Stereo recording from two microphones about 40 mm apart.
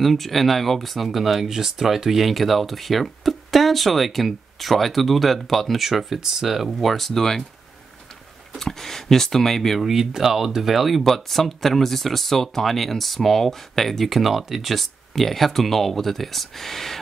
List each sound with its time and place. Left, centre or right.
0.0 s speech: centre
8.5 s speech: centre
9.8 s speech: centre